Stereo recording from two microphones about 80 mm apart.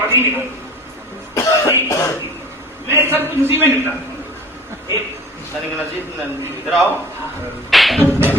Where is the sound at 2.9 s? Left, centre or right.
Right.